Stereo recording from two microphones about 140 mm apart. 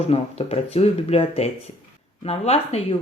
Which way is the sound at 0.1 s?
45° left (ahead or behind).